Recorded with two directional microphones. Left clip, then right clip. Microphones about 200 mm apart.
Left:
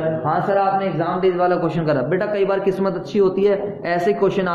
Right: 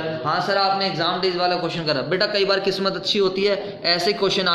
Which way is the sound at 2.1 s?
20° right (ahead or behind).